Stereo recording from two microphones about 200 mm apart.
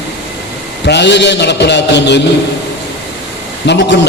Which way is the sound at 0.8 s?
60° left (ahead or behind).